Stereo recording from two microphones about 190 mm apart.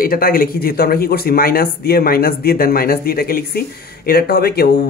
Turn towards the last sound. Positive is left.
turn(degrees=55)  # may be behind; listen again after turning